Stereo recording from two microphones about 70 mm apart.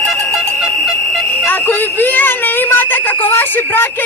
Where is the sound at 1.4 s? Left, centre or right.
Left.